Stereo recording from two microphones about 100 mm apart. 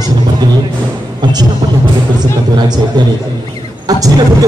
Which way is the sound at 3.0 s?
50° right (ahead or behind).